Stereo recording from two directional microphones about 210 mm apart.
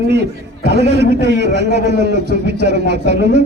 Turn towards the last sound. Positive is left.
turn(degrees=-55)  # may be behind; listen again after turning